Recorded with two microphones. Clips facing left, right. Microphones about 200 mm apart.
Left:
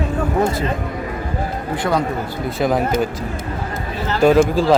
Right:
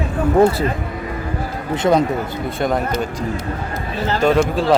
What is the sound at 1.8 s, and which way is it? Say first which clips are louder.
Speech: right 5 dB; 20° right (ahead or behind).